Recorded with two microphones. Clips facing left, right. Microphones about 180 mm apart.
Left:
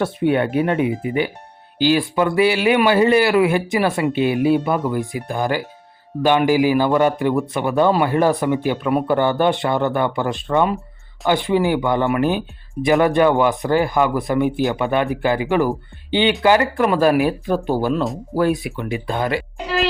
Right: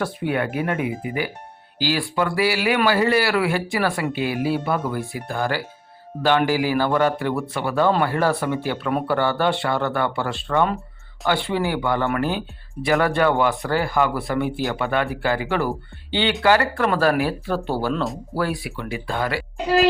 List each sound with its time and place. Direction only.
0.0 s speech: 25° left (ahead or behind)